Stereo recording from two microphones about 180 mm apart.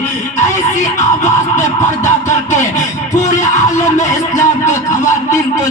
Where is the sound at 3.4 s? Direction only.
15° left (ahead or behind).